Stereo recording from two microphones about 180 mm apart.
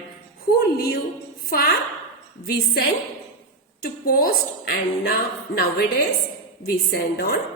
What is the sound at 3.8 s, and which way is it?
A woman's voice, 55° left (ahead or behind).